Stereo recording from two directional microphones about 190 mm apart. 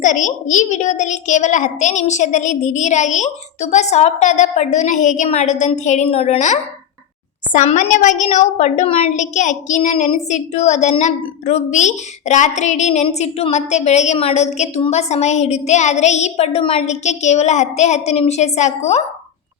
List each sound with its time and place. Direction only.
0.0 s a woman's voice: 40° left (ahead or behind)